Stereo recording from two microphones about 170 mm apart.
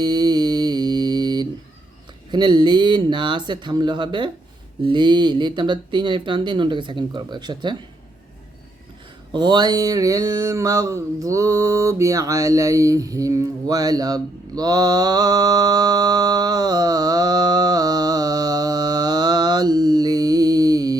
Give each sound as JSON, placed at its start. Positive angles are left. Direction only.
{"t": 0.0, "sound": "mantra", "side_deg": -25}
{"t": 2.3, "sound": "speech", "side_deg": -25}
{"t": 9.3, "sound": "mantra", "side_deg": -25}